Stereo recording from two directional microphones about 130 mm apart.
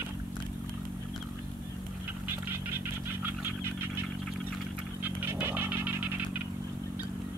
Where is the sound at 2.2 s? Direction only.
15° right (ahead or behind).